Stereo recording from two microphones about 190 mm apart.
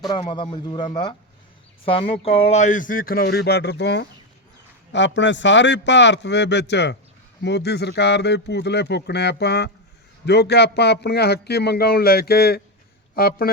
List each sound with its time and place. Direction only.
0.1 s a man's voice: 25° left (ahead or behind); by 13.5 s 50° left (ahead or behind)